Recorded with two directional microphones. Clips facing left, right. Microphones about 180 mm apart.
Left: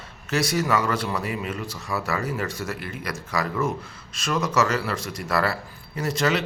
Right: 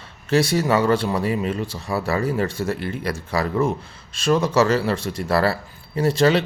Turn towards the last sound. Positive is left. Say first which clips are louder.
# right 6 dB
turn(degrees=-30)  # may be behind; listen again after turning